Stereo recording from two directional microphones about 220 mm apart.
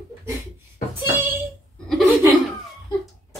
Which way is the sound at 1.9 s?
Centre (ahead or behind).